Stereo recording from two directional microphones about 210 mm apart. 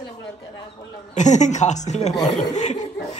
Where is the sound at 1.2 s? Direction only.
35° left (ahead or behind).